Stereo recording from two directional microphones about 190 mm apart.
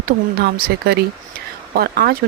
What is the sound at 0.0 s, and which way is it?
Speech, 55° right (ahead or behind).